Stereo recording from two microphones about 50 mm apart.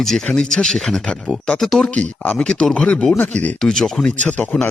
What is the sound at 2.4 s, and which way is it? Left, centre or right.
Speech, centre.